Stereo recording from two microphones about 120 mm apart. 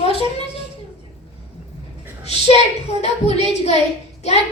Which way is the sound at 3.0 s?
65° left (ahead or behind).